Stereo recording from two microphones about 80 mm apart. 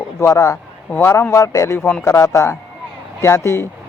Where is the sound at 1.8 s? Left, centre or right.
Centre.